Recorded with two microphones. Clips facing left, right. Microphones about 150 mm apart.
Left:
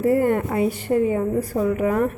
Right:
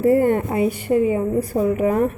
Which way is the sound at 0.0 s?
25° right (ahead or behind).